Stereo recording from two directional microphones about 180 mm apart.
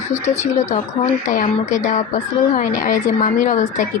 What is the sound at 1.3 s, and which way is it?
Speech, 45° left (ahead or behind).